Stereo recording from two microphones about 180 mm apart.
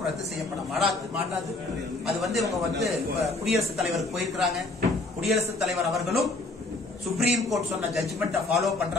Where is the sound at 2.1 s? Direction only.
Centre (ahead or behind).